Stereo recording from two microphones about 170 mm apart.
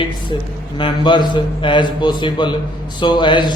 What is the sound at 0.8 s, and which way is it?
Speech, 30° left (ahead or behind).